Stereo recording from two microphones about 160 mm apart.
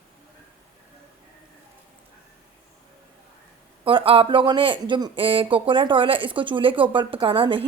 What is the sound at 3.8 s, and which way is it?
Speech, 35° right (ahead or behind).